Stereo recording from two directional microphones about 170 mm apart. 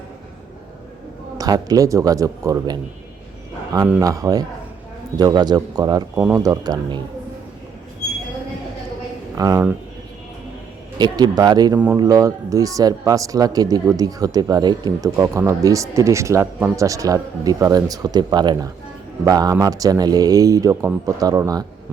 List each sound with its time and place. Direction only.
1.4 s speech: 20° right (ahead or behind)
4.0 s speech: 20° right (ahead or behind)
9.3 s speech: 20° right (ahead or behind)
10.9 s speech: 25° right (ahead or behind)